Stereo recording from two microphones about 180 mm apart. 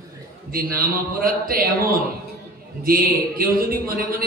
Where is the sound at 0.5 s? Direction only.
50° right (ahead or behind).